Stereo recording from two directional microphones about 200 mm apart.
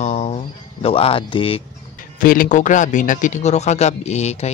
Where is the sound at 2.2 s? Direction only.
45° left (ahead or behind).